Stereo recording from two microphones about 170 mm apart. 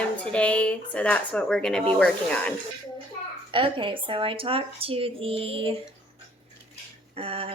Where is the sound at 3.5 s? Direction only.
30° right (ahead or behind).